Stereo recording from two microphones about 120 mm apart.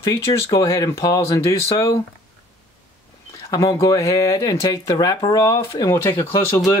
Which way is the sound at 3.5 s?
30° left (ahead or behind).